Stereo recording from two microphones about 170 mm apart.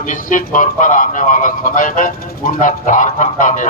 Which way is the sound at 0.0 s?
50° left (ahead or behind).